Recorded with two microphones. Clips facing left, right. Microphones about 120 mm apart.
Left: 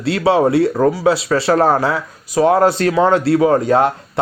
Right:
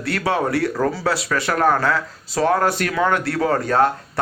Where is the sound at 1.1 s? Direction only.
25° left (ahead or behind).